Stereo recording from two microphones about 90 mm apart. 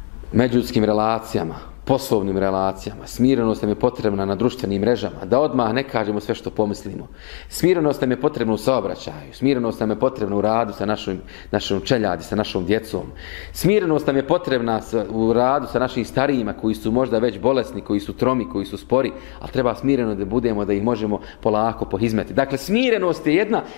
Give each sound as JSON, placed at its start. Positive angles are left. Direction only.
{"t": 0.4, "sound": "speech", "side_deg": 15}